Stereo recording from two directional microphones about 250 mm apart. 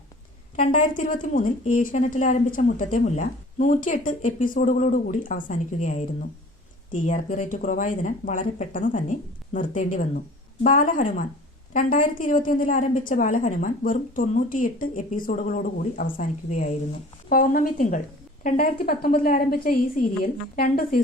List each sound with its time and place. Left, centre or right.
0.5 s a woman's voice: left